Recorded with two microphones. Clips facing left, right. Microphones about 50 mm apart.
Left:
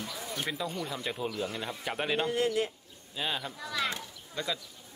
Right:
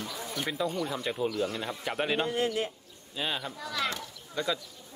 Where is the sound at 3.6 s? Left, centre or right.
Centre.